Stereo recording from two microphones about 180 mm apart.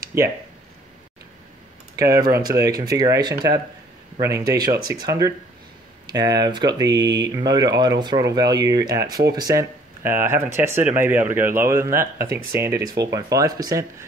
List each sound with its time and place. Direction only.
2.0 s speech: 20° right (ahead or behind)
4.3 s speech: 60° right (ahead or behind)
4.6 s speech: 20° right (ahead or behind)